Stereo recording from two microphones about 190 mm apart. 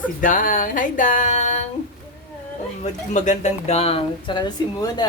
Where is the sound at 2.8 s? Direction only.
40° left (ahead or behind); by 5.0 s 20° left (ahead or behind).